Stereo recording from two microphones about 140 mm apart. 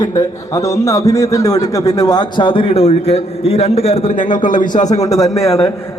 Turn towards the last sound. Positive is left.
turn(degrees=25)  # may be behind; listen again after turning